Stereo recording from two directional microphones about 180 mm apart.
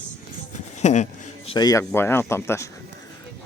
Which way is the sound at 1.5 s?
20° left (ahead or behind).